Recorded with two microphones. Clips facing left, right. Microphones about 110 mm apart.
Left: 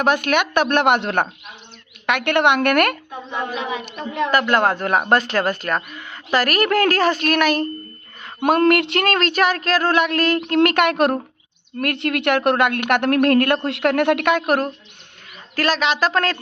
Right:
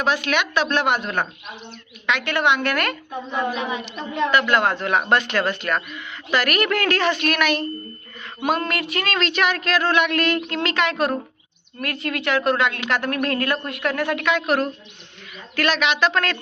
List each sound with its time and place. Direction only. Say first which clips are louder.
0.0 s a woman's voice: left 4 dB; 50° left (ahead or behind)
3.8 s speech: left 1 dB; 45° left (ahead or behind)
8.4 s a woman's voice: left 8 dB; 55° left (ahead or behind)
9.0 s a woman's voice: left 1 dB; 45° left (ahead or behind); by 13.6 s 60° left (ahead or behind)
13.7 s a woman's voice: left 6 dB; 75° left (ahead or behind)
14.3 s speech: left 2 dB; 45° left (ahead or behind)